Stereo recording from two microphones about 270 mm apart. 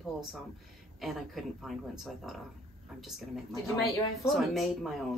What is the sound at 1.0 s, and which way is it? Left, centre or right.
Speech, centre.